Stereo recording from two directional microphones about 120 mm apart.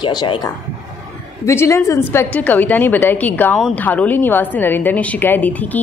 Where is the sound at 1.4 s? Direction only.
25° left (ahead or behind).